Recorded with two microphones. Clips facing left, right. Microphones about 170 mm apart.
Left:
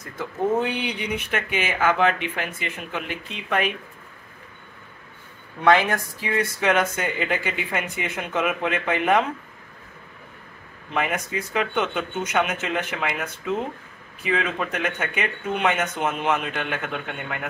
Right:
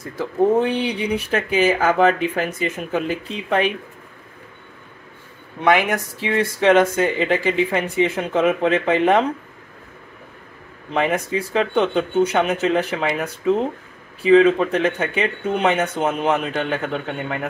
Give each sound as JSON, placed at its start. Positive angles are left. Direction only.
{"t": 0.2, "sound": "speech", "side_deg": -30}
{"t": 5.6, "sound": "speech", "side_deg": -20}
{"t": 10.9, "sound": "speech", "side_deg": -30}